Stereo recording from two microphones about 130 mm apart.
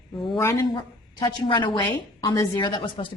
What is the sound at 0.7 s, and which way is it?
A woman's voice, 40° left (ahead or behind).